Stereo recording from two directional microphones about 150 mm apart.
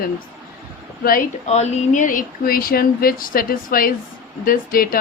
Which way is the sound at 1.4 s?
45° left (ahead or behind).